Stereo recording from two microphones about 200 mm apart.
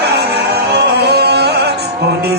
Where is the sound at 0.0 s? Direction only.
55° right (ahead or behind).